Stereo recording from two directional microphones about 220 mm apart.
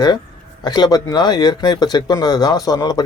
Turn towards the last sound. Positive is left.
turn(degrees=15)  # may be behind; listen again after turning